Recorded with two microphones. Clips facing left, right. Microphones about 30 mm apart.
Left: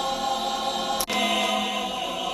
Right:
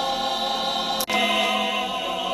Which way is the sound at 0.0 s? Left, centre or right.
Right.